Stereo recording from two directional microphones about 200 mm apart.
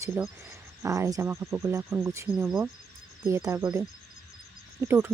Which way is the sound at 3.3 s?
15° right (ahead or behind).